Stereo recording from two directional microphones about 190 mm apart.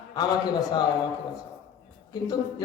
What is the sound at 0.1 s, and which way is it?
Speech, 20° left (ahead or behind).